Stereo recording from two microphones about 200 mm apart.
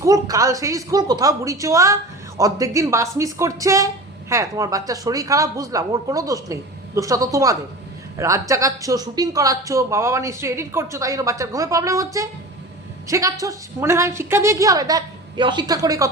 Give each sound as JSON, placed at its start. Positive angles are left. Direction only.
{"t": 0.0, "sound": "speech", "side_deg": -15}